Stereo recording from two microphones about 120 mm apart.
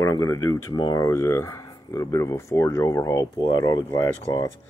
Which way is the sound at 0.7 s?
35° left (ahead or behind).